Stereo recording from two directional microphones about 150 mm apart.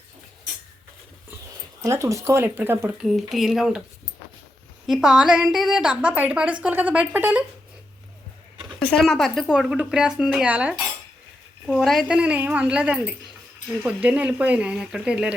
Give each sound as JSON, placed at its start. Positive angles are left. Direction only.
{"t": 1.8, "sound": "a woman's voice", "side_deg": -20}
{"t": 3.0, "sound": "speech", "side_deg": 0}
{"t": 4.9, "sound": "a woman's voice", "side_deg": -5}
{"t": 8.8, "sound": "a woman's voice", "side_deg": 5}